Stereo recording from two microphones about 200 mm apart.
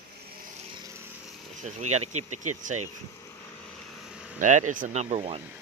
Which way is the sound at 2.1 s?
40° right (ahead or behind).